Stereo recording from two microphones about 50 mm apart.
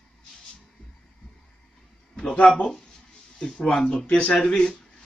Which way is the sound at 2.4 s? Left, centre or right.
Centre.